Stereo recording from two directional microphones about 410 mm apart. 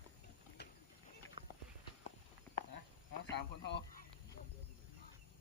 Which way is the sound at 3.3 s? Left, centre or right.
Left.